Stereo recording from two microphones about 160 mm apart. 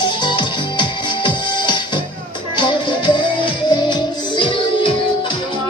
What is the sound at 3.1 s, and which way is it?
Music, 30° left (ahead or behind).